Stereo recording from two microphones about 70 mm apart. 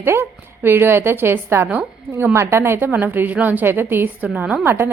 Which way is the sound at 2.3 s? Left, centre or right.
Right.